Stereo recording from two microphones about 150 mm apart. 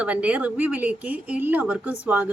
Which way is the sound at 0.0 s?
10° right (ahead or behind).